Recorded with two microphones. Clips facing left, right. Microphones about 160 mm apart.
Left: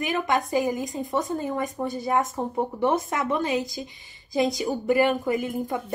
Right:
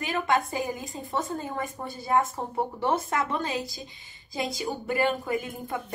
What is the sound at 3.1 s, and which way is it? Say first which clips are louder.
Speech: left 3 dB; 20° left (ahead or behind).